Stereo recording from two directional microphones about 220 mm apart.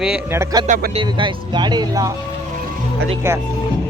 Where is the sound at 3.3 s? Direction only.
10° right (ahead or behind).